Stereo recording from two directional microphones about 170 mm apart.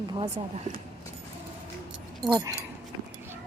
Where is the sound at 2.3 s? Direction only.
20° right (ahead or behind).